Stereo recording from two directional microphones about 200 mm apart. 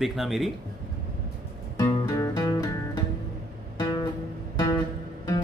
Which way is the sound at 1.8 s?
15° left (ahead or behind).